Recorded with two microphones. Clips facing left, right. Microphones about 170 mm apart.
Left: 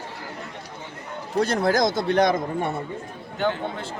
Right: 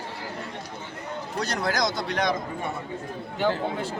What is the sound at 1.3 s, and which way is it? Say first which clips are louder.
Speech: left 7 dB; 55° left (ahead or behind).